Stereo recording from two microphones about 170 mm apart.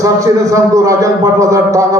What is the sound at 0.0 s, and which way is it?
A man's voice, 20° right (ahead or behind).